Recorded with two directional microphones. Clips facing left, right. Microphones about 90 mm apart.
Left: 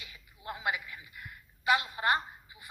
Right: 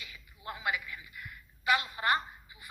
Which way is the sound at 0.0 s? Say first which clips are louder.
Right 1 dB; 25° left (ahead or behind).